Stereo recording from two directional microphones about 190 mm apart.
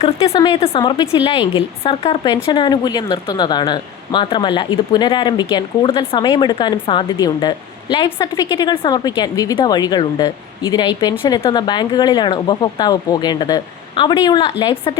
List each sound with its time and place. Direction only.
0.2 s speech: 20° left (ahead or behind)